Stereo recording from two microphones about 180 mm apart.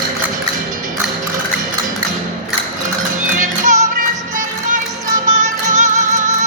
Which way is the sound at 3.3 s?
45° right (ahead or behind).